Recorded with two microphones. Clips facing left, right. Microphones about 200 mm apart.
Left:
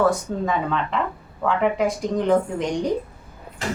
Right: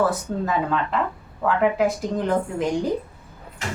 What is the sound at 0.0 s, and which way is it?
Speech, 5° right (ahead or behind).